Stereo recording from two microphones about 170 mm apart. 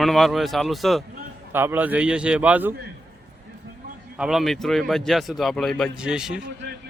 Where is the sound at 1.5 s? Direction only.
15° right (ahead or behind).